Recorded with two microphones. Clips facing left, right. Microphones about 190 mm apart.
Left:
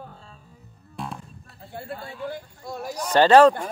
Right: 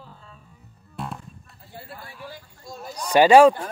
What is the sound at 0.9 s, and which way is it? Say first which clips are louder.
Music: even; centre (ahead or behind).